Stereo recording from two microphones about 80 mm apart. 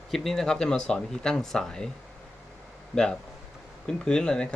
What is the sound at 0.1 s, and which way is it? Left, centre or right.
Speech, centre.